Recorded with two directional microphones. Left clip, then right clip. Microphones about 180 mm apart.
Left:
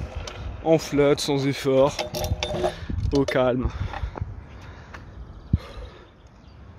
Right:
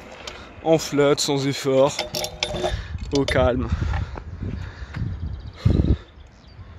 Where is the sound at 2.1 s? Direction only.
10° left (ahead or behind).